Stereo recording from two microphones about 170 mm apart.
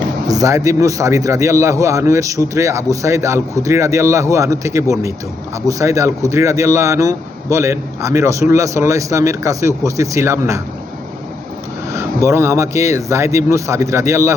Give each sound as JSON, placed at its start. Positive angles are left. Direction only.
{"t": 0.3, "sound": "speech", "side_deg": -20}
{"t": 11.9, "sound": "speech", "side_deg": -15}